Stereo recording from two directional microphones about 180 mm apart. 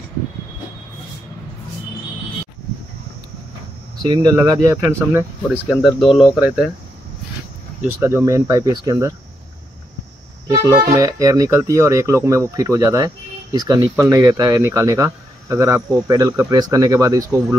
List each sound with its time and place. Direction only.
4.0 s speech: 20° right (ahead or behind)
5.7 s speech: centre (ahead or behind)
8.0 s speech: 15° right (ahead or behind)
10.5 s speech: 15° right (ahead or behind)